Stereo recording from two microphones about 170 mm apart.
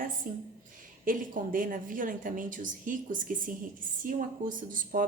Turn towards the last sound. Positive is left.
turn(degrees=-50)  # may be behind; listen again after turning